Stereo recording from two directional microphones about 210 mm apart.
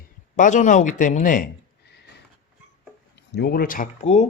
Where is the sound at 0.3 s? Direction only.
35° left (ahead or behind).